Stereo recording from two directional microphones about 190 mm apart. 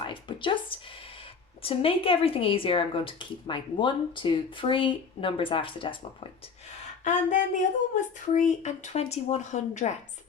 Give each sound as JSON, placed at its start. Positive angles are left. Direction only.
{"t": 0.0, "sound": "a sound", "side_deg": 25}
{"t": 1.6, "sound": "speech", "side_deg": 30}
{"t": 7.0, "sound": "speech", "side_deg": 40}